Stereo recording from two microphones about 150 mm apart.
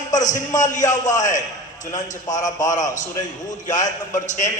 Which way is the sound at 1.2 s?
55° left (ahead or behind).